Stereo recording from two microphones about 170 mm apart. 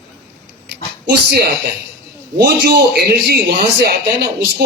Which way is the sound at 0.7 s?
75° right (ahead or behind).